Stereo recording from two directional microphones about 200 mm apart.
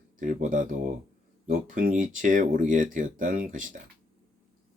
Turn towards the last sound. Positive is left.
turn(degrees=-40)  # may be behind; listen again after turning